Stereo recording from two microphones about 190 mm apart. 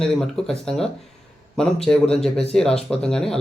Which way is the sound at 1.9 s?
15° left (ahead or behind).